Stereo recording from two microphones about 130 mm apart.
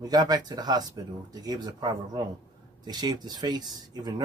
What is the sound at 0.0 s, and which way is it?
Speech, 30° right (ahead or behind).